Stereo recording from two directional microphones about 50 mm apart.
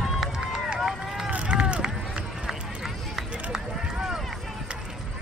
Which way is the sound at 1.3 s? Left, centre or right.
Right.